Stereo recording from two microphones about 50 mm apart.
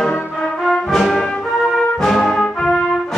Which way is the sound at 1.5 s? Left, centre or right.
Centre.